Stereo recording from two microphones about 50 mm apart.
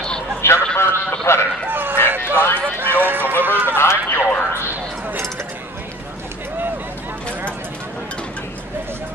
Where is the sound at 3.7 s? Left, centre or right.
Left.